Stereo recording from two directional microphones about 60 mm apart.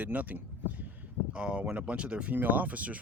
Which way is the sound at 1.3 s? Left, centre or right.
Centre.